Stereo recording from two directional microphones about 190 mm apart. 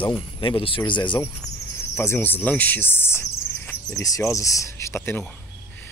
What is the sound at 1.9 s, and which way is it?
Speech, 10° left (ahead or behind).